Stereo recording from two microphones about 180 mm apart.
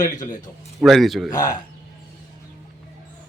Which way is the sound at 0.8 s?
Centre (ahead or behind).